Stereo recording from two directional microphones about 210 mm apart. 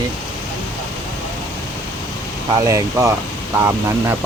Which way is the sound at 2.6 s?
15° right (ahead or behind).